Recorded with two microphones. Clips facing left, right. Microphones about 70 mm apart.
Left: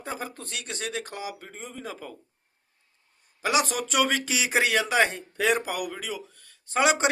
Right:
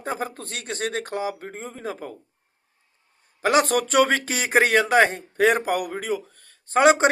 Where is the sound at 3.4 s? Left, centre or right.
Right.